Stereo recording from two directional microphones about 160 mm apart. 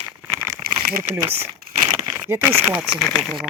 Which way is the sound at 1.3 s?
35° right (ahead or behind).